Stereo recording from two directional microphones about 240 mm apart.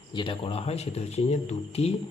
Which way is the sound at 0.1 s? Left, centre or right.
Left.